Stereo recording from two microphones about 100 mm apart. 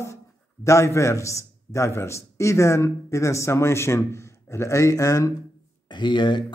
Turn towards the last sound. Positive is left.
turn(degrees=55)  # may be behind; listen again after turning